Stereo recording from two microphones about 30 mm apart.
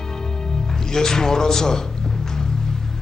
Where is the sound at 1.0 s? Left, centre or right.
Centre.